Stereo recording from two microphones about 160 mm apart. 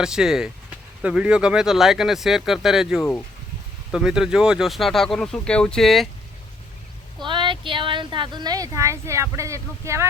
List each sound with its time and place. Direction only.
0.0 s speech: 5° right (ahead or behind)
3.0 s speech: 10° left (ahead or behind)
3.9 s speech: 5° right (ahead or behind)
7.3 s speech: 30° right (ahead or behind)